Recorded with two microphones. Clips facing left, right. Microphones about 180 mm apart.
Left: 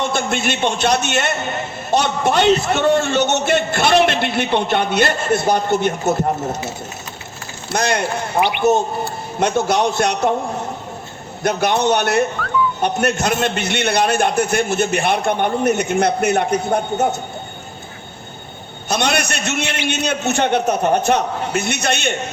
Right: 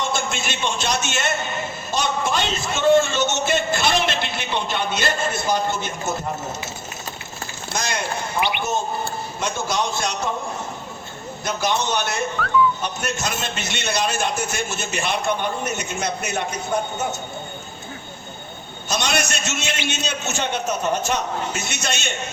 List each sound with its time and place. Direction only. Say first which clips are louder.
0.0 s a man's voice: left 5 dB; 60° left (ahead or behind)
11.4 s a man's voice: left 7 dB; 60° left (ahead or behind)
18.9 s a man's voice: left 4 dB; 60° left (ahead or behind)